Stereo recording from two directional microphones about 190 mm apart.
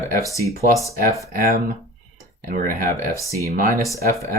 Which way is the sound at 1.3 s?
50° right (ahead or behind).